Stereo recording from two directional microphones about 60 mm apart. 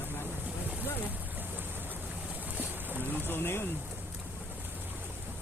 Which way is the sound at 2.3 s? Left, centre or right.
Right.